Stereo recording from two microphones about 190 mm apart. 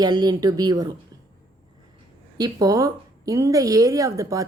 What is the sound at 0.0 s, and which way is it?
Speech, 20° right (ahead or behind).